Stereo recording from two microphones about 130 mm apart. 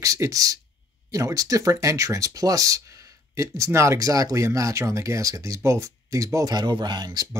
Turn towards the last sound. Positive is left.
turn(degrees=-30)  # may be behind; listen again after turning